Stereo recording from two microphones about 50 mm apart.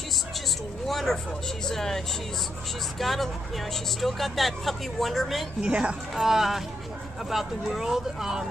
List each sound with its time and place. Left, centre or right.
0.8 s speech: centre
3.0 s speech: centre
5.6 s a woman's voice: right
6.1 s speech: centre